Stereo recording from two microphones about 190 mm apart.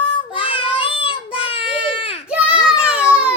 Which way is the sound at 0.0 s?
25° left (ahead or behind).